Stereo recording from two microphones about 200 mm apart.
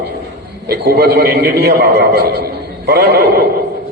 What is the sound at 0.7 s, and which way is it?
A man's voice, 55° right (ahead or behind).